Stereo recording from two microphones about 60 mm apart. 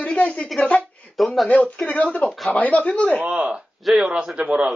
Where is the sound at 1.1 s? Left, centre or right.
Centre.